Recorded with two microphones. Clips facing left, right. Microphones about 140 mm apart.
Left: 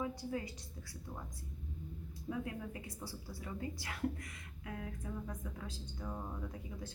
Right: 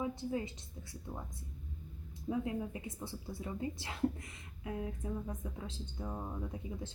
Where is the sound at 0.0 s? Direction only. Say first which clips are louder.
Right 3 dB; 25° right (ahead or behind).